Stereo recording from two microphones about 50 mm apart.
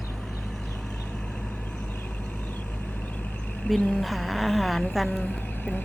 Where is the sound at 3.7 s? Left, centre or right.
Left.